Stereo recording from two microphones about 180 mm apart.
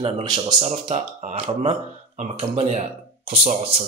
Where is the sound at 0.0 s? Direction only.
25° right (ahead or behind).